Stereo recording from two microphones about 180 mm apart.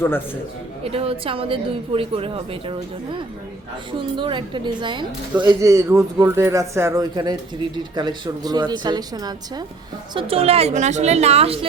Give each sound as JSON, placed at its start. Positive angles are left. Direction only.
{"t": 0.9, "sound": "a woman's voice", "side_deg": -30}
{"t": 10.2, "sound": "a woman's voice", "side_deg": -35}